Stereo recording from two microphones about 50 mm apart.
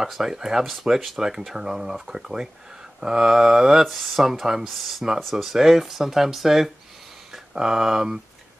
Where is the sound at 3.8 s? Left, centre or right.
Centre.